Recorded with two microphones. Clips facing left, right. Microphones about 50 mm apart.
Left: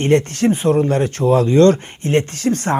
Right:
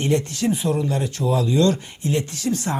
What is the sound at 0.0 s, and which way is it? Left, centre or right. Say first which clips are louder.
Speech: left 6 dB; left.